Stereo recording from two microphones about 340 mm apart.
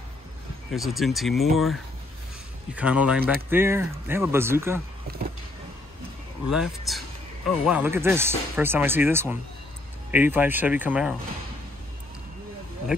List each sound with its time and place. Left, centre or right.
0.7 s a man's voice: centre
6.4 s a man's voice: centre